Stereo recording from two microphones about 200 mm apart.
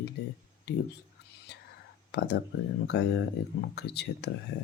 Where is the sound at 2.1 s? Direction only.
55° left (ahead or behind).